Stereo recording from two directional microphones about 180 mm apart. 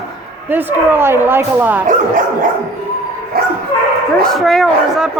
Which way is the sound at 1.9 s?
45° right (ahead or behind).